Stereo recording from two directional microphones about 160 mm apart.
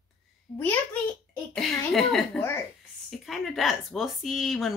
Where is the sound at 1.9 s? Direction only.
Centre (ahead or behind).